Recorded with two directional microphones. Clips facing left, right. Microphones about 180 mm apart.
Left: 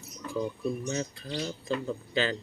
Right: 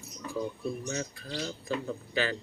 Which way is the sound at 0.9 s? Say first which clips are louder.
Left 3 dB; 25° left (ahead or behind).